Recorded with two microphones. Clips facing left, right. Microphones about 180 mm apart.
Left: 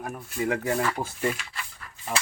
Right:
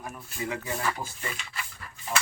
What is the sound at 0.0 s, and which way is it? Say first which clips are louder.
Speech: left 6 dB; 55° left (ahead or behind).